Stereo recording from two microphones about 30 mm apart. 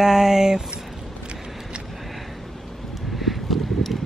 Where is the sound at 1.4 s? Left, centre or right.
Centre.